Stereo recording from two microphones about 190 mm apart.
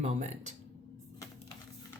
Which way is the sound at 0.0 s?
40° right (ahead or behind).